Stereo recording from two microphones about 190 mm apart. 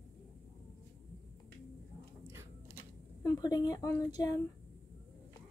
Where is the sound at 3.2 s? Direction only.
20° left (ahead or behind).